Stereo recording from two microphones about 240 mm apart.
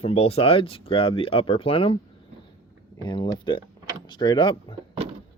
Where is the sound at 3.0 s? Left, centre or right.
Centre.